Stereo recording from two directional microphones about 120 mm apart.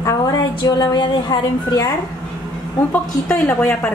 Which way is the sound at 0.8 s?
35° left (ahead or behind).